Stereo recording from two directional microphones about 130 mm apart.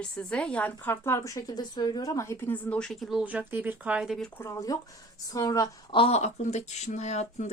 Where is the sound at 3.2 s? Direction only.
10° right (ahead or behind).